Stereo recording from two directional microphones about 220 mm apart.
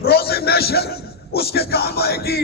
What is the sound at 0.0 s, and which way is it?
A man's voice, 45° left (ahead or behind).